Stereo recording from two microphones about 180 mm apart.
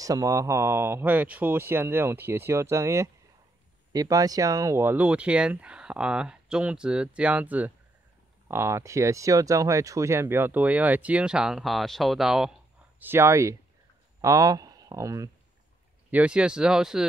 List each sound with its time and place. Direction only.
0.0 s speech: 20° right (ahead or behind); by 12.5 s centre (ahead or behind)
13.0 s speech: 15° right (ahead or behind)
16.1 s speech: 5° right (ahead or behind)